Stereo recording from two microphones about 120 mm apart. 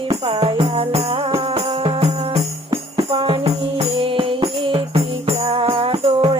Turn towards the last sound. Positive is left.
turn(degrees=-50)  # may be behind; listen again after turning